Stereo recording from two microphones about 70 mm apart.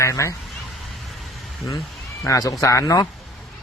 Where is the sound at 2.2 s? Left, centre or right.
Left.